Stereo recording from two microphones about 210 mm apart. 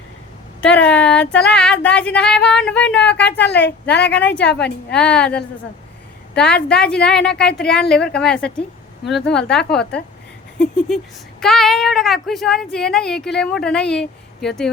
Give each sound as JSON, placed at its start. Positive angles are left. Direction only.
{"t": 0.6, "sound": "speech", "side_deg": 5}
{"t": 3.3, "sound": "a woman's voice", "side_deg": 55}
{"t": 4.0, "sound": "a woman's voice", "side_deg": 5}